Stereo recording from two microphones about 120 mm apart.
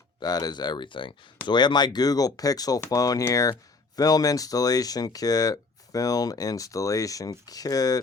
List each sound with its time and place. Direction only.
0.2 s speech: 35° left (ahead or behind)